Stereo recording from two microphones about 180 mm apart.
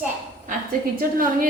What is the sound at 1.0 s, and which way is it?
Speech, 50° right (ahead or behind).